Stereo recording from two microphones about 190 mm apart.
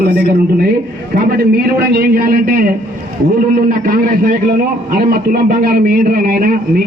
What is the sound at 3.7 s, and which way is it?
A man's voice, 50° right (ahead or behind).